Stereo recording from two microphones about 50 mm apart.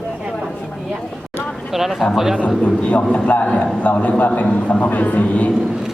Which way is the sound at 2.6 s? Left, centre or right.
Left.